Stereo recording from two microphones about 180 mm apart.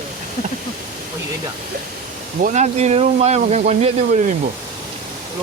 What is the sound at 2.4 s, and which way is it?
Speech, 40° right (ahead or behind).